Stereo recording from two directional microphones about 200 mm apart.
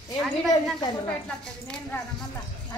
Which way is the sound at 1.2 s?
5° left (ahead or behind).